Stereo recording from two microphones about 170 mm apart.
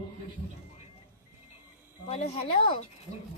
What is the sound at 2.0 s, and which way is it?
Speech, 35° left (ahead or behind).